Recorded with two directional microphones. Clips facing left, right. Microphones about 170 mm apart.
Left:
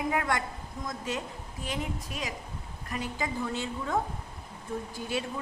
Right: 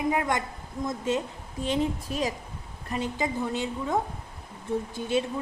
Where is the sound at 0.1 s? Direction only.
20° right (ahead or behind).